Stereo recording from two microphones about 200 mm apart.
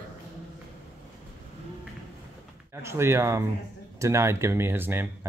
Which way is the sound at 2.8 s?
15° right (ahead or behind).